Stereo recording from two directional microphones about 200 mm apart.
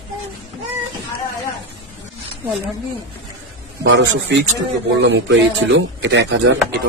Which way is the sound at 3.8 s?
65° right (ahead or behind).